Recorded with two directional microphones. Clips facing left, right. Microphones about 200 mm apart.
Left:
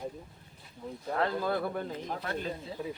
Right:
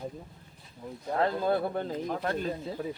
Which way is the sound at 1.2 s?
25° right (ahead or behind).